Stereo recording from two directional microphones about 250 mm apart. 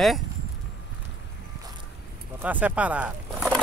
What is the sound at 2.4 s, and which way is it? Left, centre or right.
Speech, centre.